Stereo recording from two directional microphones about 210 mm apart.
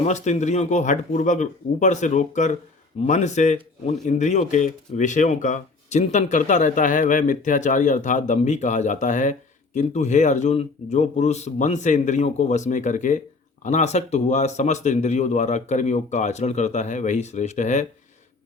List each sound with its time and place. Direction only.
0.0 s speech: 35° left (ahead or behind)